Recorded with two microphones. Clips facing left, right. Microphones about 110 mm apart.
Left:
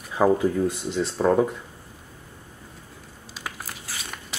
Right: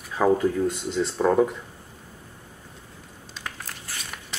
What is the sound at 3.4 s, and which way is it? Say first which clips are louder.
Biting: left 1 dB; 10° left (ahead or behind).